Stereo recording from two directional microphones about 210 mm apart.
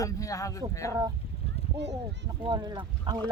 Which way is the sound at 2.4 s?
20° right (ahead or behind).